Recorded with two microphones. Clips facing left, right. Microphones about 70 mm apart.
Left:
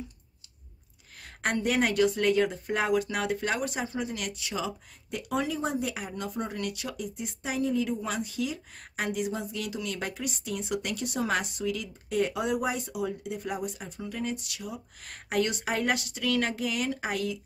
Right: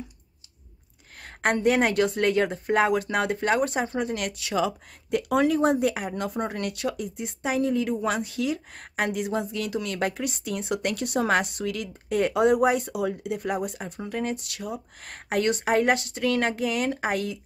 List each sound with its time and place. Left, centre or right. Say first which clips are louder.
1.2 s speech: right 6 dB; right